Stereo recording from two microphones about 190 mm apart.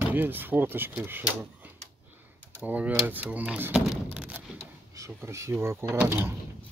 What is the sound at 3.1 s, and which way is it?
Door, 10° right (ahead or behind).